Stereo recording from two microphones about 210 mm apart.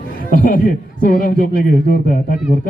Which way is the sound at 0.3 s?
40° left (ahead or behind).